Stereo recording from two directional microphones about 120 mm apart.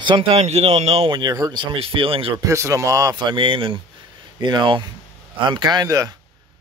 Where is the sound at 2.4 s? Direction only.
25° right (ahead or behind).